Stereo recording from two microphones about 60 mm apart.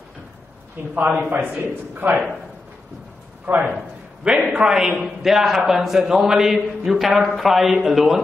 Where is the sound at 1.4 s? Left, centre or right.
Right.